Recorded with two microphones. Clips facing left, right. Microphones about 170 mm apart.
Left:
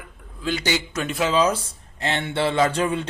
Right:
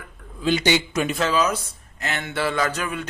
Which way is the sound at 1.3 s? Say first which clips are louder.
Left 2 dB; 30° left (ahead or behind).